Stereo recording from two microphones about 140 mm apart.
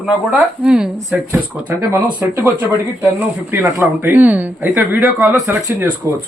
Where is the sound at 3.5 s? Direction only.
15° right (ahead or behind).